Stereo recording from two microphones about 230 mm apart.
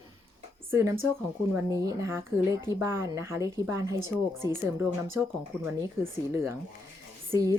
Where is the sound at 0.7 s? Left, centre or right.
Centre.